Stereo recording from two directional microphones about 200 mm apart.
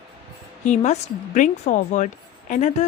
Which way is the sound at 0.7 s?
35° left (ahead or behind).